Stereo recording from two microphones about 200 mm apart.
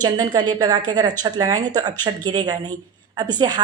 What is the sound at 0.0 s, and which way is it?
Speech, 20° right (ahead or behind).